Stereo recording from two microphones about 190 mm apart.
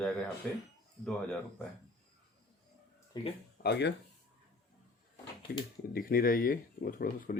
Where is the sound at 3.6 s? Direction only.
60° left (ahead or behind).